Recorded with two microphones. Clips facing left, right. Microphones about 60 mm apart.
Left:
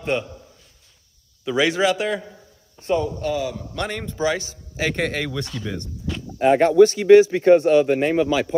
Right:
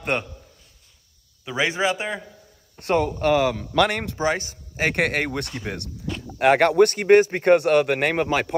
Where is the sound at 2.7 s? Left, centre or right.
Right.